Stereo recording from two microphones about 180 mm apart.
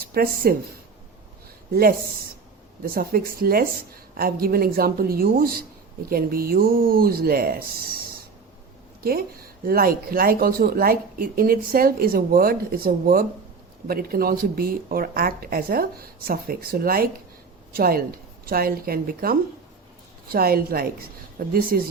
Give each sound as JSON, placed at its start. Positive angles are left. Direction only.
{"t": 0.1, "sound": "speech", "side_deg": -55}
{"t": 1.7, "sound": "speech", "side_deg": -55}
{"t": 9.6, "sound": "speech", "side_deg": -55}